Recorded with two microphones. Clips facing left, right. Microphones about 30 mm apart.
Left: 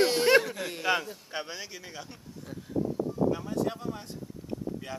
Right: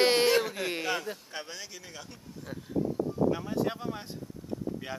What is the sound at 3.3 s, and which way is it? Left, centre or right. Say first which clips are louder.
Speech: even; centre.